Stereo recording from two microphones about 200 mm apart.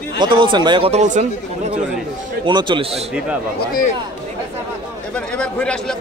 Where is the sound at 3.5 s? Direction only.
45° left (ahead or behind).